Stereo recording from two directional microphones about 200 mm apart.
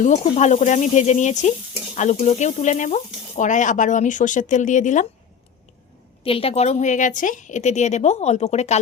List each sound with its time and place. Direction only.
0.0 s sizzle: 35° left (ahead or behind)
6.2 s sizzle: 30° left (ahead or behind)